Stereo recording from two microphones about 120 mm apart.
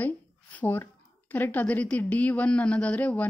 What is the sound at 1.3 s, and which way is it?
A woman's voice, 15° left (ahead or behind).